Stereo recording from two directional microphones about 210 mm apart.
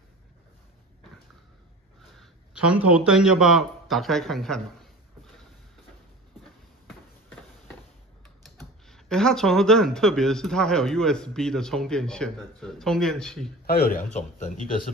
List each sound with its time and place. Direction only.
2.1 s a man's voice: 5° right (ahead or behind)
8.5 s speech: centre (ahead or behind)
13.7 s a man's voice: 45° left (ahead or behind)